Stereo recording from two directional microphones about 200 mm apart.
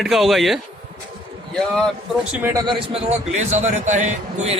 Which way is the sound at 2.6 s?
30° right (ahead or behind).